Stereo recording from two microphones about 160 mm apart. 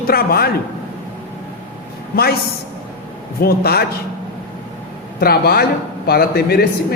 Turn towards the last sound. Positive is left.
turn(degrees=75)  # may be behind; listen again after turning